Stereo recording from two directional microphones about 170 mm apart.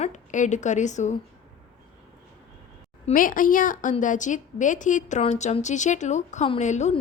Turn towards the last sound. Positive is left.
turn(degrees=45)  # may be behind; listen again after turning